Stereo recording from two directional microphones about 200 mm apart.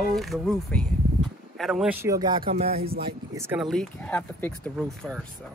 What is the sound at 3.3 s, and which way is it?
Speech, 10° right (ahead or behind).